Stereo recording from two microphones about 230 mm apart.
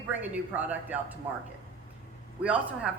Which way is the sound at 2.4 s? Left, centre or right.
Centre.